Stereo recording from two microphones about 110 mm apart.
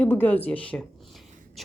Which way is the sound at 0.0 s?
15° left (ahead or behind).